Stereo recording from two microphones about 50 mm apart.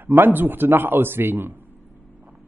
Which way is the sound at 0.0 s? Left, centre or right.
Right.